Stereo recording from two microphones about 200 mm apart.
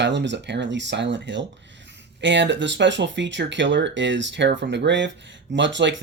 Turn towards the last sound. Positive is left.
turn(degrees=-65)  # may be behind; listen again after turning